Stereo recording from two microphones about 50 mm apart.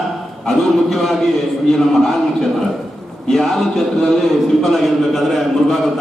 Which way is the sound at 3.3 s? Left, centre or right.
Centre.